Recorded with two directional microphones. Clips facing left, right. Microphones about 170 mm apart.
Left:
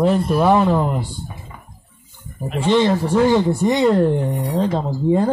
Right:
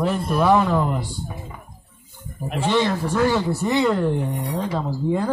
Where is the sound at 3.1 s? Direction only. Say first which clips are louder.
Left 5 dB; 15° left (ahead or behind).